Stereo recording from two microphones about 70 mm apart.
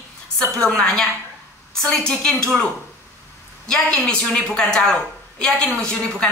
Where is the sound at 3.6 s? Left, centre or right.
Centre.